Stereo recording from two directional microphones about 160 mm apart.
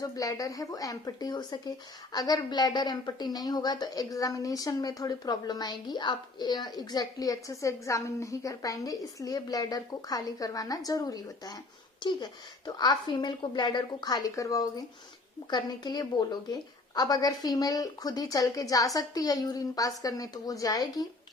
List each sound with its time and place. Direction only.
0.0 s a woman's voice: 20° left (ahead or behind)